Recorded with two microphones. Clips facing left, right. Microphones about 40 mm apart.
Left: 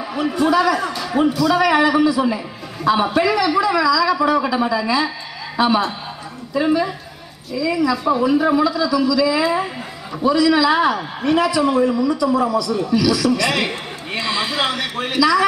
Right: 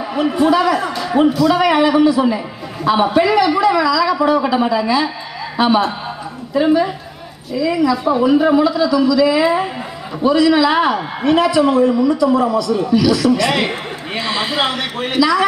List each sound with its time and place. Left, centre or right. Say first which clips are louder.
0.0 s a man's voice: right 4 dB; centre
4.5 s a man's voice: right 3 dB; right
7.5 s a man's voice: right 3 dB; centre